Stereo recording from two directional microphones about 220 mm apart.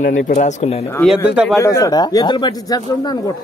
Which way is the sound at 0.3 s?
35° left (ahead or behind).